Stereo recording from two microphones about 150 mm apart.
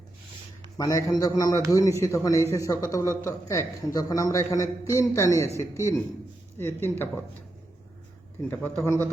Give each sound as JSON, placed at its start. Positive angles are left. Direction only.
{"t": 0.8, "sound": "a man's voice", "side_deg": 25}
{"t": 8.4, "sound": "a man's voice", "side_deg": 10}